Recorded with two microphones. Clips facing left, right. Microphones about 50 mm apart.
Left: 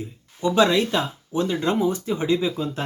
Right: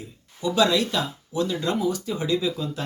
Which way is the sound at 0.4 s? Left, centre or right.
Left.